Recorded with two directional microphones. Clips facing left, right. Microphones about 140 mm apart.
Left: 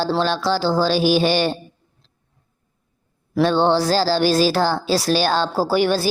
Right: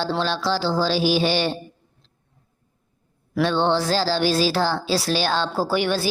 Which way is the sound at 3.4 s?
40° left (ahead or behind).